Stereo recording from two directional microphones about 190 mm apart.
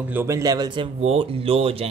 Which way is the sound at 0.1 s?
15° right (ahead or behind).